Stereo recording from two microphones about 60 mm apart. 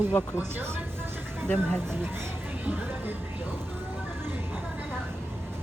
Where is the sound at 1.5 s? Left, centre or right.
Centre.